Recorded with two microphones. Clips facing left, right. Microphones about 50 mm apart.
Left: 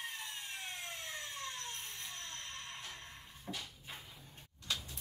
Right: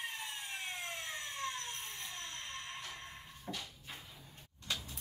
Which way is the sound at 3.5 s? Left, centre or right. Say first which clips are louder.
Right 1 dB; centre.